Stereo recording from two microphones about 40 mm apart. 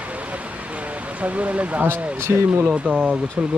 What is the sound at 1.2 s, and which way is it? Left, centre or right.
Speech, right.